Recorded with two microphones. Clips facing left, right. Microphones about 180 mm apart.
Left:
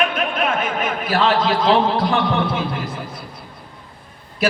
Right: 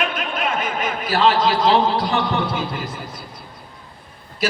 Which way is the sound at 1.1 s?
55° left (ahead or behind).